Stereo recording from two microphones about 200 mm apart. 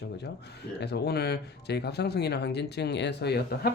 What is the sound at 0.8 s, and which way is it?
Speech, 55° left (ahead or behind).